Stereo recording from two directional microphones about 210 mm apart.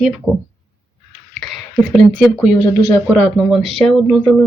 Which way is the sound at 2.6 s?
15° left (ahead or behind).